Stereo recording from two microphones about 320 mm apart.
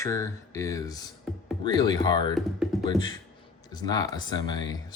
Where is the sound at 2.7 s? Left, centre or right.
Centre.